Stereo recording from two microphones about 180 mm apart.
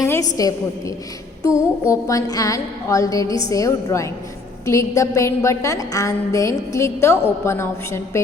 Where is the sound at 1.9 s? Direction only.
20° left (ahead or behind).